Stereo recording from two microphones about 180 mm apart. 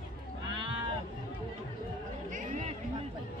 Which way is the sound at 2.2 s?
40° right (ahead or behind).